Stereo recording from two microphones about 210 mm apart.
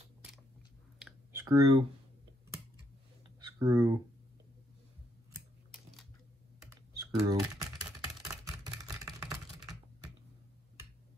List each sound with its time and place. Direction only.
1.3 s speech: 15° right (ahead or behind)
3.4 s speech: 15° right (ahead or behind)
6.9 s computer keyboard: 15° right (ahead or behind)
7.8 s a sound: 15° right (ahead or behind)